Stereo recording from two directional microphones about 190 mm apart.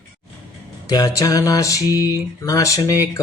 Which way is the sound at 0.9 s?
20° left (ahead or behind).